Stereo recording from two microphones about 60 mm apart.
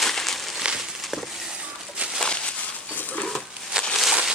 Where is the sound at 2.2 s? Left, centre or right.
Centre.